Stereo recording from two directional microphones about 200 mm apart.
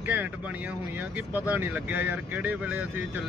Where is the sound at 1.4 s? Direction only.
10° right (ahead or behind).